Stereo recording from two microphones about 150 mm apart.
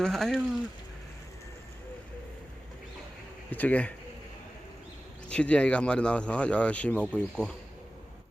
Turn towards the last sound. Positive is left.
turn(degrees=5)  # may be behind; listen again after turning